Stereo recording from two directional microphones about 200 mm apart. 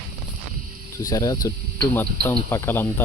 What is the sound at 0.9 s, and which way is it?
Speech, 15° left (ahead or behind).